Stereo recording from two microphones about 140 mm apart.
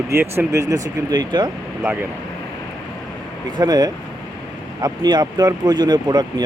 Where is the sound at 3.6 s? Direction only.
30° right (ahead or behind).